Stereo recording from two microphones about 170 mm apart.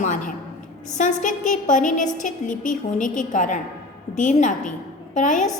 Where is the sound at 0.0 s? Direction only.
45° left (ahead or behind).